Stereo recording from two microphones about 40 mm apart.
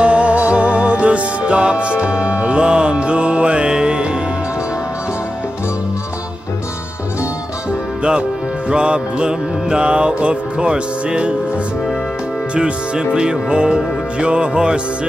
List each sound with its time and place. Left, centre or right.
0.0 s music: right
8.0 s music: right
12.5 s music: right